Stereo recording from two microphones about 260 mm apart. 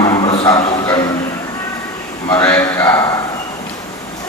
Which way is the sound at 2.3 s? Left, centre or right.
Centre.